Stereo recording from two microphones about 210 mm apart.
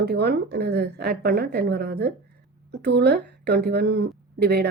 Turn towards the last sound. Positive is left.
turn(degrees=-50)  # may be behind; listen again after turning